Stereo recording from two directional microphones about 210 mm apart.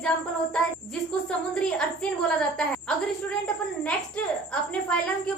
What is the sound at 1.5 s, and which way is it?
A woman's voice, 5° left (ahead or behind).